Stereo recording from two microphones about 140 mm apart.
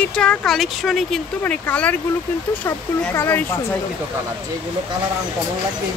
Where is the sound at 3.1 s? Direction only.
20° left (ahead or behind).